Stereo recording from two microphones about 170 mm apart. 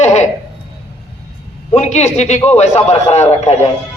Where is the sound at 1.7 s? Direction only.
40° left (ahead or behind).